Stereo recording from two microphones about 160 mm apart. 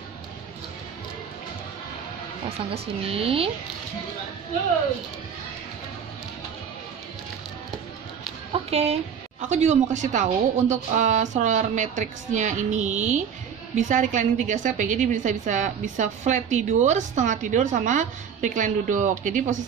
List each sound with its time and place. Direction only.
2.7 s speech: 35° right (ahead or behind)
8.6 s a woman's voice: 40° right (ahead or behind)